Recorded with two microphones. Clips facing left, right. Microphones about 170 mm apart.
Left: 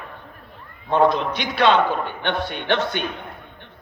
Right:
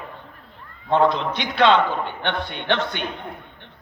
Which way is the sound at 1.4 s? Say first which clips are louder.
Right 1 dB; 20° right (ahead or behind).